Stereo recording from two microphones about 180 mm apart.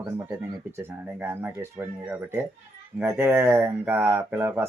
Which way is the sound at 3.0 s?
10° right (ahead or behind).